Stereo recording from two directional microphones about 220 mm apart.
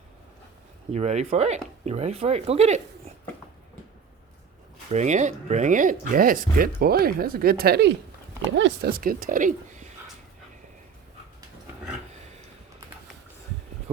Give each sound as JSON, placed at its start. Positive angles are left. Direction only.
{"t": 0.9, "sound": "speech", "side_deg": -30}
{"t": 4.9, "sound": "speech", "side_deg": -30}
{"t": 8.9, "sound": "speech", "side_deg": -40}
{"t": 12.1, "sound": "a sound", "side_deg": -30}